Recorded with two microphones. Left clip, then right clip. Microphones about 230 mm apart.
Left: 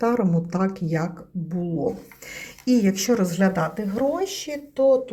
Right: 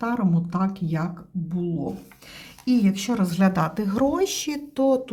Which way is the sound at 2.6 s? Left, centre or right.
Centre.